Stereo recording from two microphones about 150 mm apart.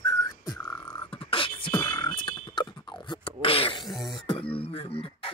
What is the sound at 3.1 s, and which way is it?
Beatboxing, 35° left (ahead or behind).